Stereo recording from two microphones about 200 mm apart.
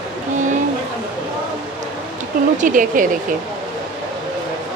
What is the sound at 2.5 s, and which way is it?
Speech, 40° right (ahead or behind).